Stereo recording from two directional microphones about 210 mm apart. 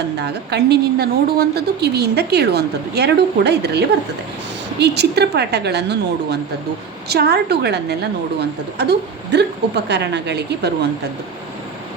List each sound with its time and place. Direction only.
0.2 s a woman's voice: 50° right (ahead or behind)